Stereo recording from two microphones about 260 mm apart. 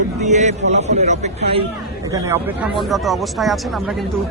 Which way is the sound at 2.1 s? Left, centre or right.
Centre.